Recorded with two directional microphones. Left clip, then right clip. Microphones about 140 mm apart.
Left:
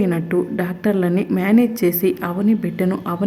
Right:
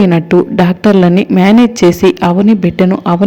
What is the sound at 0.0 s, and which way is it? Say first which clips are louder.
Speech: right 10 dB; 40° right (ahead or behind).